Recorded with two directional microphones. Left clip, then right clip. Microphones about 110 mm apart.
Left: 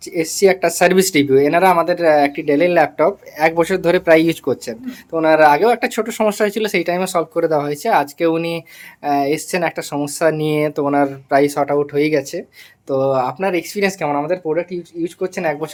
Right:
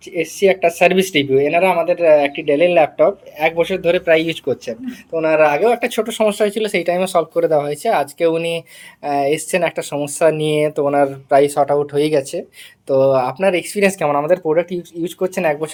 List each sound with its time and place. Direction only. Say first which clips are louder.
0.1 s speech: left 1 dB; 35° left (ahead or behind)
3.3 s speech: left 1 dB; 55° left (ahead or behind)
4.5 s speech: right 1 dB; 40° left (ahead or behind); by 14.1 s 20° left (ahead or behind)
14.3 s speech: right 4 dB; 10° right (ahead or behind)